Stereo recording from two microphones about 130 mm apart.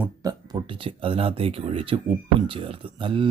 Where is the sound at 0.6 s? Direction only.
40° right (ahead or behind).